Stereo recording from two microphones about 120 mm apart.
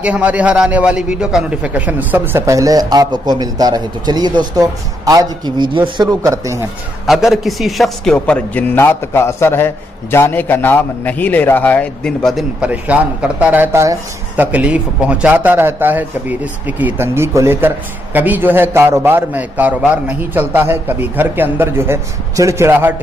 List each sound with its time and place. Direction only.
0.0 s a man's voice: 10° right (ahead or behind)
2.4 s a man's voice: 30° right (ahead or behind)
6.0 s speech: 25° right (ahead or behind)
7.1 s a man's voice: centre (ahead or behind)
12.5 s a man's voice: 10° right (ahead or behind)